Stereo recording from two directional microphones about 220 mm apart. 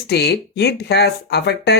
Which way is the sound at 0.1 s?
50° left (ahead or behind).